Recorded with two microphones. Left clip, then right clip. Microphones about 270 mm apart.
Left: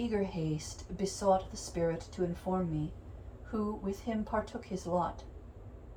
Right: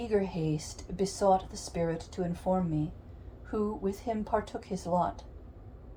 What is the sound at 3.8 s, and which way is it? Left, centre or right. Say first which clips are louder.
Speech: right 4 dB; right.